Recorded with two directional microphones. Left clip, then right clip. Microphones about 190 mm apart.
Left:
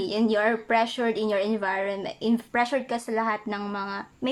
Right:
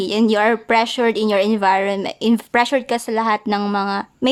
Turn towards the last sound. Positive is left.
turn(degrees=-45)  # may be behind; listen again after turning